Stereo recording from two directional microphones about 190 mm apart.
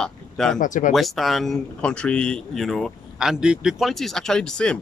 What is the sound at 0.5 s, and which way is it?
Speech, 40° left (ahead or behind).